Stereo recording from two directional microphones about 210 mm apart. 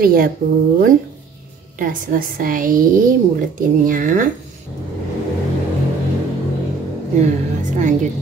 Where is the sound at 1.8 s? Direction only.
40° right (ahead or behind).